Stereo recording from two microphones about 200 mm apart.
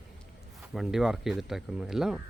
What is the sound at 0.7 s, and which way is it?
Speech, centre (ahead or behind).